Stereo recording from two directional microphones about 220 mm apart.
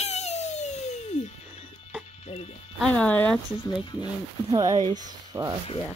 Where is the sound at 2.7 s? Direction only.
5° left (ahead or behind).